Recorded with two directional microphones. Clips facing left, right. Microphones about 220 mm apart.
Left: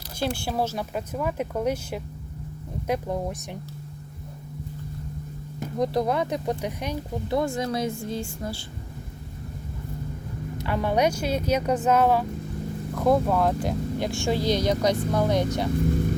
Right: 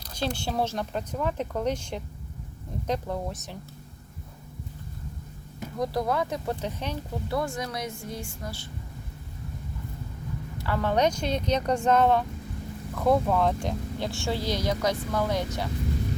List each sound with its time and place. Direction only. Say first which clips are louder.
0.4 s speech: left 1 dB; 5° left (ahead or behind)
5.7 s speech: left 3 dB; 20° left (ahead or behind)
10.6 s speech: left 1 dB; 15° left (ahead or behind)